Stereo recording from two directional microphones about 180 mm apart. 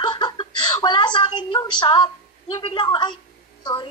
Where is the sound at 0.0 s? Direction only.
25° left (ahead or behind).